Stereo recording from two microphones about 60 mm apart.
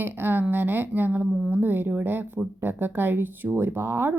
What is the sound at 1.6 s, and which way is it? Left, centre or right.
Speech, right.